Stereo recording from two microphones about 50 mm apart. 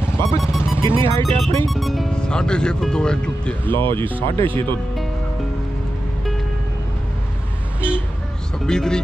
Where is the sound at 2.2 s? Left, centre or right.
Centre.